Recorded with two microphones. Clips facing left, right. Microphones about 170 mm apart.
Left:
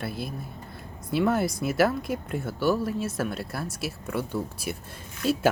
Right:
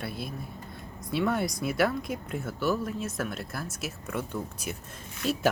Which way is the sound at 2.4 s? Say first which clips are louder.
Left 4 dB; 30° left (ahead or behind).